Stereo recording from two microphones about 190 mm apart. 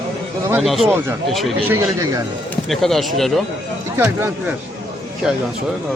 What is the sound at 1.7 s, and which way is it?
Speech, 15° right (ahead or behind).